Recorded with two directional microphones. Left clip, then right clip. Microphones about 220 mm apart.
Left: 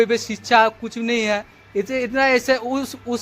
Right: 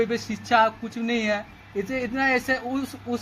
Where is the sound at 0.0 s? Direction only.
50° left (ahead or behind).